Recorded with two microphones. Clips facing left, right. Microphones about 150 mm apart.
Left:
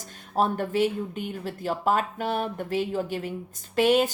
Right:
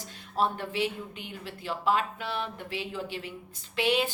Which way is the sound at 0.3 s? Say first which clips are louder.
Left 5 dB; 45° left (ahead or behind).